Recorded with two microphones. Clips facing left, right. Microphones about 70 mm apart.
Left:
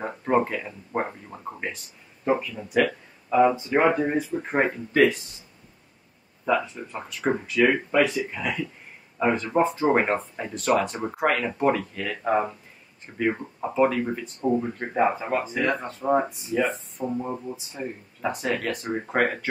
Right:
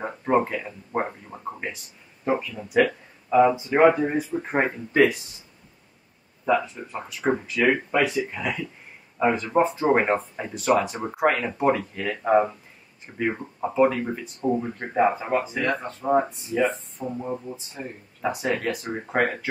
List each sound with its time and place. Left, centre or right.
0.0 s a sound: centre
2.7 s speech: centre
6.4 s speech: centre
18.2 s speech: centre